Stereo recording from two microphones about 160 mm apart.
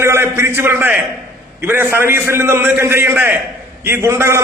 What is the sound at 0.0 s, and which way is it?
A man's voice, 15° right (ahead or behind).